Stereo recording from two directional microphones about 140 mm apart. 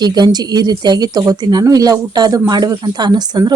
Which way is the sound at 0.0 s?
30° right (ahead or behind).